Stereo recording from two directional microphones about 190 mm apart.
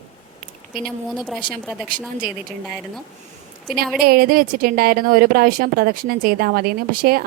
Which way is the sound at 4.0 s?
55° right (ahead or behind).